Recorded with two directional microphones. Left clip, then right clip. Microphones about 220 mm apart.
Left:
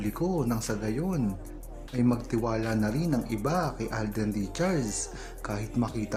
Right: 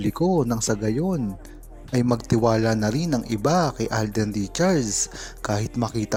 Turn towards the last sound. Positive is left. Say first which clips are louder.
# right 5 dB
turn(degrees=-35)  # may be behind; listen again after turning